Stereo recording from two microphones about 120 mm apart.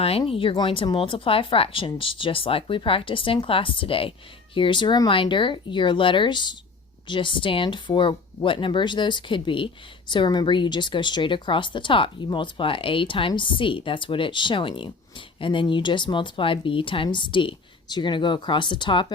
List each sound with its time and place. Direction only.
0.0 s speech: 55° left (ahead or behind)